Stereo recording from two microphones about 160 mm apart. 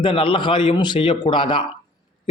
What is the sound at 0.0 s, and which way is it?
A man's voice, 30° left (ahead or behind).